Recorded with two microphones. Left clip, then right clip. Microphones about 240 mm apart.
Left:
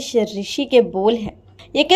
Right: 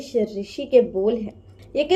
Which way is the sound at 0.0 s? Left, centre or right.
Left.